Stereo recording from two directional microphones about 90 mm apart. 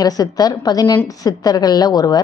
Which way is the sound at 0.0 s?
45° left (ahead or behind).